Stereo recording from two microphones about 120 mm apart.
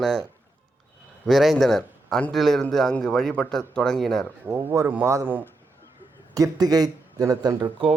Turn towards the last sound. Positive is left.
turn(degrees=-40)  # may be behind; listen again after turning